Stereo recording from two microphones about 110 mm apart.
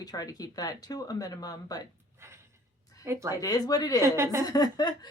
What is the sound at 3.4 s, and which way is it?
Speech, 35° left (ahead or behind).